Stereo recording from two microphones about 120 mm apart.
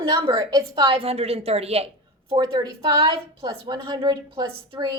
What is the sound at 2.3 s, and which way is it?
A woman's voice, 40° right (ahead or behind).